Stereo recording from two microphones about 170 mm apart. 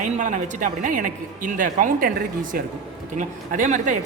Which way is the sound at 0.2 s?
45° right (ahead or behind).